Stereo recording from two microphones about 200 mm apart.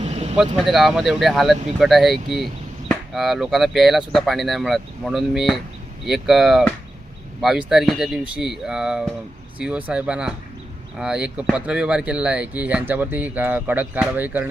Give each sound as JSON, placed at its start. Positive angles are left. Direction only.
{"t": 0.0, "sound": "vehicle", "side_deg": -30}
{"t": 0.5, "sound": "speech", "side_deg": 0}